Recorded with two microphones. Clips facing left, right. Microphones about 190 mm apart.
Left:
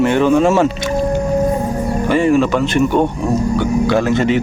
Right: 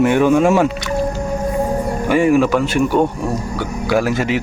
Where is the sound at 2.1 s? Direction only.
10° right (ahead or behind).